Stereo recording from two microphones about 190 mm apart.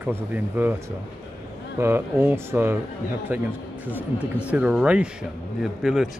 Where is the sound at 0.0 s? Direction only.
10° right (ahead or behind).